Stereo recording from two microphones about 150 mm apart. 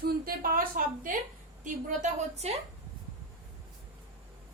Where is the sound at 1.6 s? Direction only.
55° right (ahead or behind).